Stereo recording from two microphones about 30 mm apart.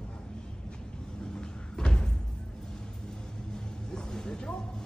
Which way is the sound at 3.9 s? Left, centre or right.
Left.